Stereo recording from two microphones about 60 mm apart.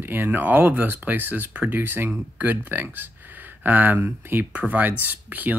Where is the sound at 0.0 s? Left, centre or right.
Right.